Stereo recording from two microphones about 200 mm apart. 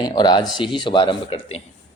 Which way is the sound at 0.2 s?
20° left (ahead or behind).